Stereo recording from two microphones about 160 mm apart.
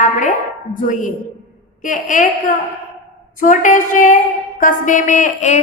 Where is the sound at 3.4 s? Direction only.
55° left (ahead or behind).